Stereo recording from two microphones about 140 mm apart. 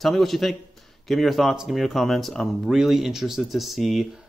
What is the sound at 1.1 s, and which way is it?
Speech, centre (ahead or behind).